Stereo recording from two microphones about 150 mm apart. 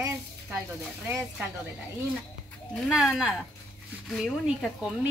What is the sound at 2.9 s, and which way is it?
Speech, 5° right (ahead or behind).